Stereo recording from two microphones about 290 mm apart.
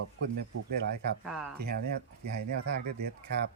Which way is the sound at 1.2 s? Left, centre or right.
Centre.